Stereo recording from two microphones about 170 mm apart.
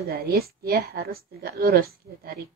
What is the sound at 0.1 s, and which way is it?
A woman's voice, 65° right (ahead or behind).